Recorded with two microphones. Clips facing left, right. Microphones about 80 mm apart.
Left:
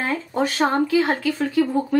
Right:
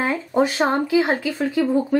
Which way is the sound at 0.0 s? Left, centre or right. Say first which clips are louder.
Right 3 dB; centre.